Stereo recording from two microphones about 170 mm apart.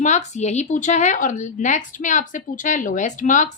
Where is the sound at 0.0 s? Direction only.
45° left (ahead or behind).